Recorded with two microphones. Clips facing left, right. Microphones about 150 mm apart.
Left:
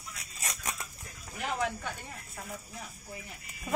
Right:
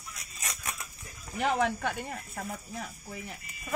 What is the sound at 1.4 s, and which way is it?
Speech, 65° right (ahead or behind).